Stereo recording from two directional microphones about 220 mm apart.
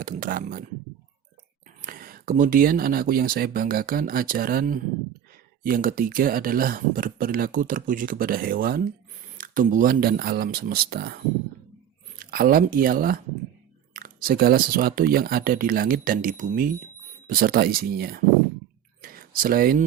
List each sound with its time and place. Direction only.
0.0 s speech: 40° right (ahead or behind)
1.8 s speech: 40° right (ahead or behind)
19.0 s a sound: 40° right (ahead or behind)